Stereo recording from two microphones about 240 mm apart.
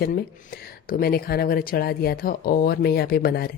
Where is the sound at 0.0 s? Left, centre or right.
Left.